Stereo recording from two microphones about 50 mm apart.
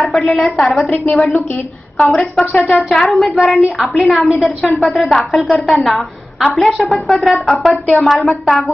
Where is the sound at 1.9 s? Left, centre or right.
Centre.